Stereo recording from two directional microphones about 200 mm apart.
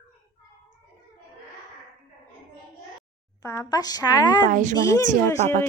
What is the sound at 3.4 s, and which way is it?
A woman's voice, 15° left (ahead or behind).